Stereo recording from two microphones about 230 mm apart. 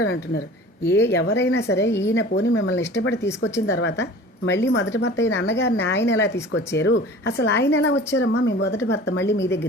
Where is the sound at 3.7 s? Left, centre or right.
Left.